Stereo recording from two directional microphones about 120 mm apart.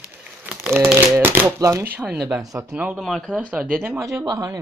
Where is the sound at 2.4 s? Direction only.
30° right (ahead or behind).